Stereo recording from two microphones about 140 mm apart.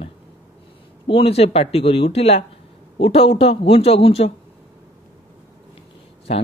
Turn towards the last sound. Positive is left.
turn(degrees=45)  # may be behind; listen again after turning